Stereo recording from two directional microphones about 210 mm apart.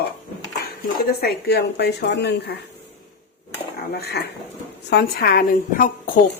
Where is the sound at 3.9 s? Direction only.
50° left (ahead or behind).